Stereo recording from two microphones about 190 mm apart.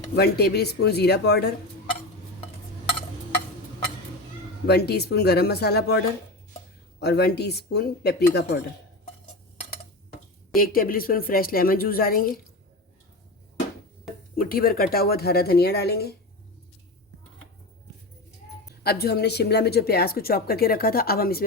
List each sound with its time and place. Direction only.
0.2 s speech: 60° left (ahead or behind)
4.6 s speech: 60° left (ahead or behind)
7.0 s speech: 60° left (ahead or behind)
10.6 s a woman's voice: 50° left (ahead or behind)
14.3 s speech: 50° left (ahead or behind)
18.7 s speech: 55° left (ahead or behind)